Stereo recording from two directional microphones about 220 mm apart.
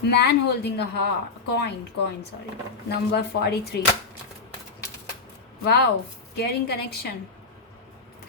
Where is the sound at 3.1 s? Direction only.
45° left (ahead or behind).